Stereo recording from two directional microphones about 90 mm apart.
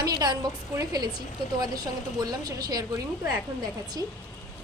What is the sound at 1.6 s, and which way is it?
A woman's voice, 50° right (ahead or behind).